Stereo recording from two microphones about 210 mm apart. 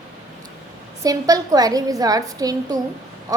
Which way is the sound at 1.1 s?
15° right (ahead or behind).